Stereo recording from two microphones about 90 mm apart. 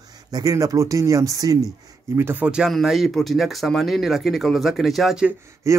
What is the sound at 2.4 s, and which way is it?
Speech, 10° right (ahead or behind).